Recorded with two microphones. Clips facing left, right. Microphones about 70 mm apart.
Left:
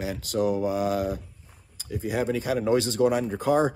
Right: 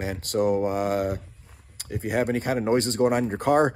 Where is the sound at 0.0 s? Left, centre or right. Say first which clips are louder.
Right 2 dB; right.